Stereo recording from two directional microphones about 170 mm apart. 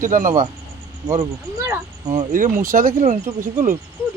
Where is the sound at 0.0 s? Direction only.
50° right (ahead or behind).